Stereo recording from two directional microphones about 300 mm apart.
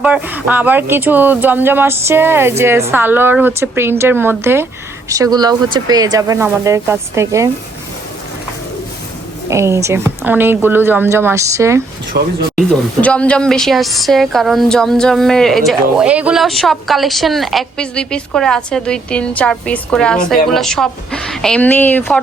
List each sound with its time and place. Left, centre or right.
0.0 s speech: centre
9.5 s speech: centre
12.1 s speech: right
12.5 s a woman's voice: centre